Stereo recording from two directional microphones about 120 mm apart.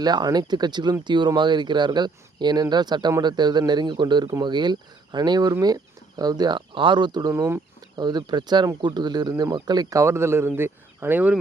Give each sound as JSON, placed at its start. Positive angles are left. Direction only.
{"t": 0.0, "sound": "speech", "side_deg": -35}
{"t": 7.3, "sound": "speech", "side_deg": -20}
{"t": 7.8, "sound": "speech", "side_deg": -35}